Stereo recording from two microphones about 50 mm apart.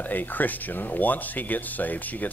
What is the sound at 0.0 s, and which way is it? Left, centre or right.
Speech, left.